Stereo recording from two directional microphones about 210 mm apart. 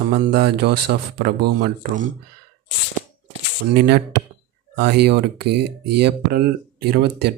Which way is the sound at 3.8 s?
50° right (ahead or behind).